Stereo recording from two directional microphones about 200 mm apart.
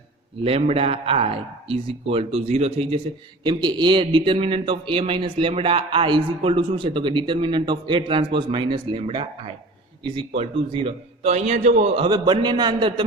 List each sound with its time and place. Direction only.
0.4 s a man's voice: 30° right (ahead or behind)